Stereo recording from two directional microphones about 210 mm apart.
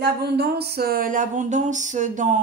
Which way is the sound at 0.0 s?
50° right (ahead or behind).